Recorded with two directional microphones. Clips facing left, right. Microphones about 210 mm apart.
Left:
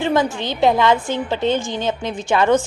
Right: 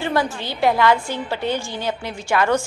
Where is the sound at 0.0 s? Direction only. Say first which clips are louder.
Left 4 dB; 20° left (ahead or behind).